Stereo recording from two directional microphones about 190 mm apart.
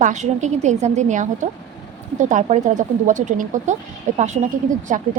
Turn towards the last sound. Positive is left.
turn(degrees=-40)  # may be behind; listen again after turning